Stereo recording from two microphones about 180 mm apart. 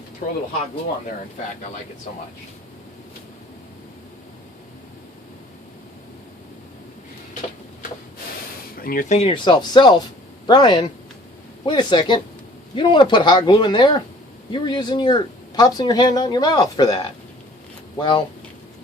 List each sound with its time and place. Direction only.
8.7 s speech: 55° left (ahead or behind); by 18.2 s 25° left (ahead or behind)